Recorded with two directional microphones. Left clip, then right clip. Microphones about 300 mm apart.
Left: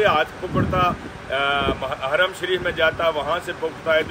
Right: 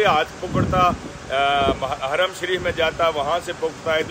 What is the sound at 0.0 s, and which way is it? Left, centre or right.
Speech, centre.